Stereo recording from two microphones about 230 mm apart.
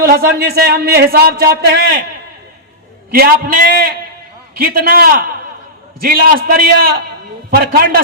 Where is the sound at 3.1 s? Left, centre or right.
Right.